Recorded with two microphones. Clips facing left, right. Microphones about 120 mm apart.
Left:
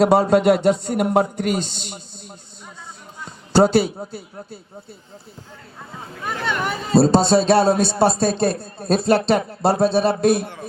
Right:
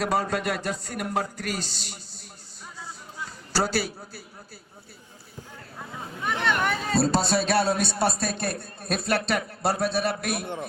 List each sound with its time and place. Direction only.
0.0 s a man's voice: 25° left (ahead or behind)
3.2 s music: 25° left (ahead or behind)
6.2 s speech: 5° left (ahead or behind)
6.9 s a man's voice: 25° left (ahead or behind)